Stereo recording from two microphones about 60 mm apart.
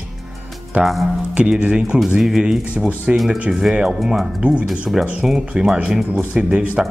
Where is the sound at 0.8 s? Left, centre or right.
Right; by 4.3 s centre.